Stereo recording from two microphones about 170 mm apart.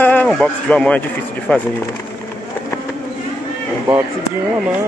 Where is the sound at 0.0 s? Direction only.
10° left (ahead or behind).